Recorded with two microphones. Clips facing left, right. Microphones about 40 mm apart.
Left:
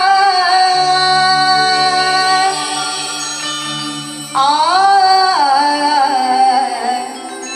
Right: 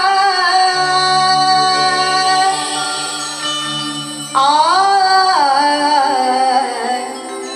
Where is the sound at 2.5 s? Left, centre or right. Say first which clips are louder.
Even; right.